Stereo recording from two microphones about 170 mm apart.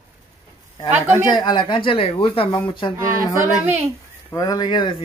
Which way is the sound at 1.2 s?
25° left (ahead or behind).